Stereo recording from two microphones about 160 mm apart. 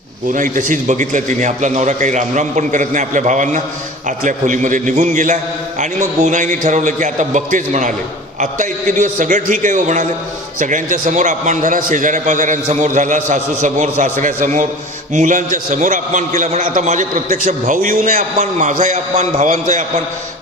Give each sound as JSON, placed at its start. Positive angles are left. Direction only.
{"t": 0.3, "sound": "a man's voice", "side_deg": -55}